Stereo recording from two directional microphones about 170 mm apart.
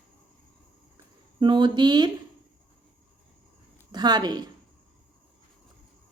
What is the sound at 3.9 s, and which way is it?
Speech, 25° right (ahead or behind).